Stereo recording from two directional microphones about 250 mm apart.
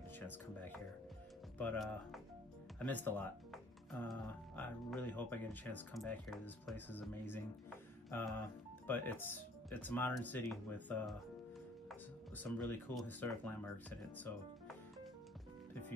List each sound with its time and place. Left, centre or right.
0.3 s speech: centre